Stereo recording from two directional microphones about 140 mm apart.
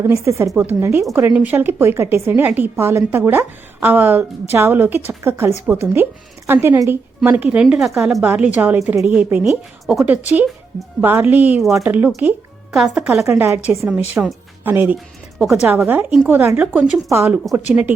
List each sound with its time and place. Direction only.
0.0 s a woman's voice: 20° right (ahead or behind); by 13.1 s centre (ahead or behind)
13.2 s a woman's voice: 20° right (ahead or behind)
14.9 s speech: centre (ahead or behind)
15.6 s a woman's voice: 10° right (ahead or behind)